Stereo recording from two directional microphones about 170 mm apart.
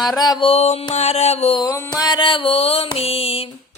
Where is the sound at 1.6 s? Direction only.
20° left (ahead or behind).